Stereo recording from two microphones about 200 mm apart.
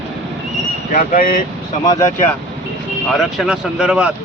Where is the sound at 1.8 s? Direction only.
15° left (ahead or behind).